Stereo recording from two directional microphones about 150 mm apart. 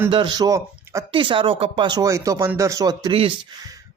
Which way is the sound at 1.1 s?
35° right (ahead or behind).